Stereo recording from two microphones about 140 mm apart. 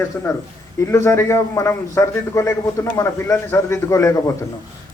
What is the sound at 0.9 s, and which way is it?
A man's voice, 20° left (ahead or behind).